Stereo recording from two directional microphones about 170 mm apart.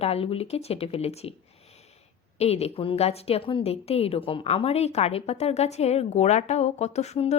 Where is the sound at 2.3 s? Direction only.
40° left (ahead or behind).